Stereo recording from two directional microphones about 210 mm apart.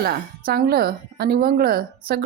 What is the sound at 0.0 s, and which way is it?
A woman's voice, 45° right (ahead or behind).